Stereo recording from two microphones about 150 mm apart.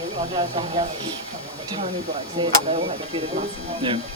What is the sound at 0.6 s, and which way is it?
Speech, 40° right (ahead or behind).